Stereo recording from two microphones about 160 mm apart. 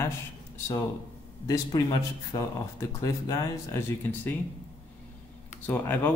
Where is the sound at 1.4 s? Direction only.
25° left (ahead or behind).